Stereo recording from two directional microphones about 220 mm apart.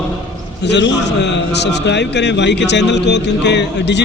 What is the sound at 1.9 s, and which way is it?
A man's voice, 50° left (ahead or behind).